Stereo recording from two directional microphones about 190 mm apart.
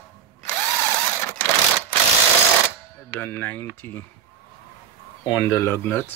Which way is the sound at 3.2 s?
10° left (ahead or behind).